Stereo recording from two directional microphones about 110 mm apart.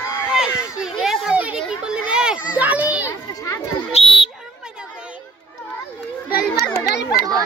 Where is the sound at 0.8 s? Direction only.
5° right (ahead or behind).